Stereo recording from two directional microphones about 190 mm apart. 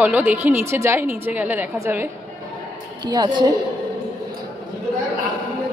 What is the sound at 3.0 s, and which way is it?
Speech, 20° right (ahead or behind).